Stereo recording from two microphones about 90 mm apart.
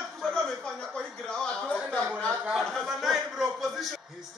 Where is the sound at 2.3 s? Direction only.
15° right (ahead or behind).